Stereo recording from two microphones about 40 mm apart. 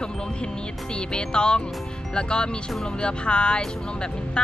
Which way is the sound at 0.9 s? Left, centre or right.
Left.